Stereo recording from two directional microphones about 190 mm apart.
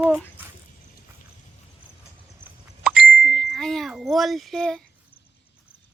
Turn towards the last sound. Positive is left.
turn(degrees=0)  # may be behind; listen again after turning